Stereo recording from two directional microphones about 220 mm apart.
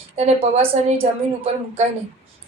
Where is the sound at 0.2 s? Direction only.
30° right (ahead or behind).